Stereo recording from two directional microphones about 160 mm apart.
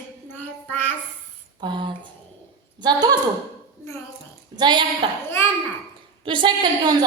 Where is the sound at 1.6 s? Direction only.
30° right (ahead or behind).